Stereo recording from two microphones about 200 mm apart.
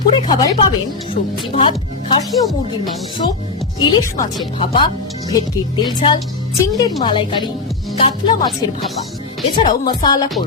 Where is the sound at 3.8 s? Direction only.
25° left (ahead or behind).